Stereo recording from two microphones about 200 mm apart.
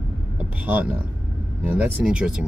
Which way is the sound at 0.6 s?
10° right (ahead or behind).